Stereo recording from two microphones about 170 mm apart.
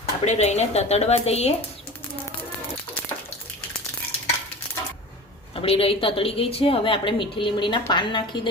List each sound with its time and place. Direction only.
0.0 s a woman's voice: 40° left (ahead or behind)
5.5 s a woman's voice: 35° left (ahead or behind)